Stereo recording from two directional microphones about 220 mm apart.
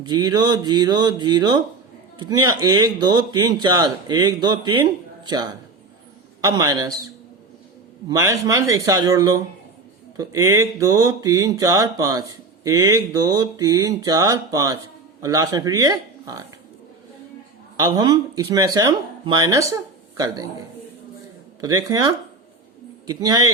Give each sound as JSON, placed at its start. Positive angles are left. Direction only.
{"t": 0.0, "sound": "speech", "side_deg": -20}
{"t": 8.1, "sound": "speech", "side_deg": -15}
{"t": 17.7, "sound": "speech", "side_deg": -20}
{"t": 21.6, "sound": "speech", "side_deg": -15}